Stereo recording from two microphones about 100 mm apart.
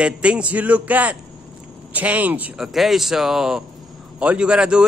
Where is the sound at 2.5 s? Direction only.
5° right (ahead or behind).